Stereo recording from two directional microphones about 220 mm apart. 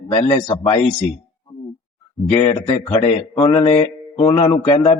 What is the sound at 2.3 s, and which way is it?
A man's voice, 25° left (ahead or behind).